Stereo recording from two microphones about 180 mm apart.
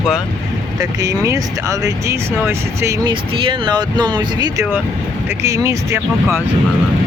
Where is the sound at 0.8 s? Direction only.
20° right (ahead or behind).